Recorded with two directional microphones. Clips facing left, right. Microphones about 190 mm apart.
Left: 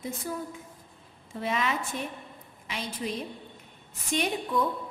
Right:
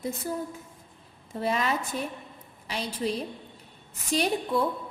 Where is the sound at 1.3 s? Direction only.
40° right (ahead or behind).